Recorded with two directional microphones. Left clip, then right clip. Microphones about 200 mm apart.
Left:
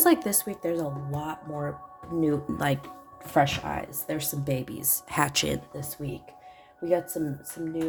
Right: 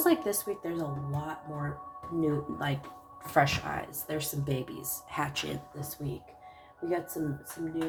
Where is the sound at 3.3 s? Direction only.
30° left (ahead or behind); by 5.4 s 50° left (ahead or behind).